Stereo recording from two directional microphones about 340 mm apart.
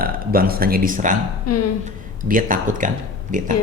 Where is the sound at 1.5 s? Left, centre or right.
Left.